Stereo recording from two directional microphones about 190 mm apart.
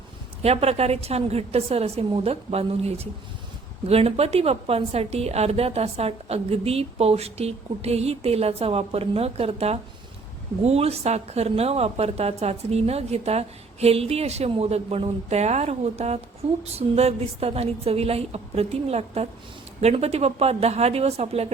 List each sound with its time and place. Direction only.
0.4 s a woman's voice: 35° right (ahead or behind)